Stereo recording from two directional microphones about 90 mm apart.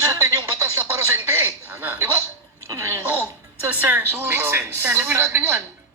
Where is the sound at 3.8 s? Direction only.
25° right (ahead or behind).